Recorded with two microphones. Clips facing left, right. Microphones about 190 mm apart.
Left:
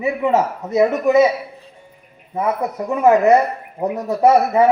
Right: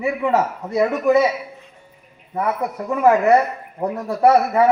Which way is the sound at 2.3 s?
20° left (ahead or behind).